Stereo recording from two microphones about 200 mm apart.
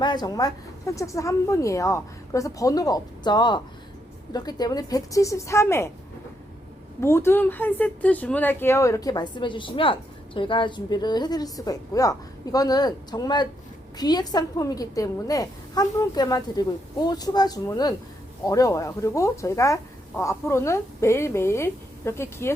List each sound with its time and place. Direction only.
0.0 s speech: 20° left (ahead or behind)
7.0 s speech: 10° left (ahead or behind)